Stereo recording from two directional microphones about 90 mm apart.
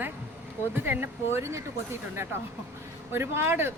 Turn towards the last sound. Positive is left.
turn(degrees=-25)  # may be behind; listen again after turning